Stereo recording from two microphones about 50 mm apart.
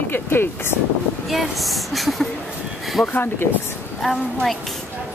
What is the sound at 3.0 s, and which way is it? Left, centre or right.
Speech, left.